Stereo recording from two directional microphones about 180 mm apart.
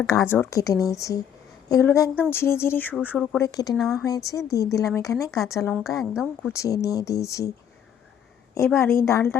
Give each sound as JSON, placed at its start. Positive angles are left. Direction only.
{"t": 0.0, "sound": "speech", "side_deg": 15}
{"t": 3.8, "sound": "speech", "side_deg": 0}
{"t": 4.0, "sound": "speech", "side_deg": 20}
{"t": 6.0, "sound": "speech", "side_deg": -5}
{"t": 6.5, "sound": "speech", "side_deg": 20}
{"t": 8.5, "sound": "speech", "side_deg": 15}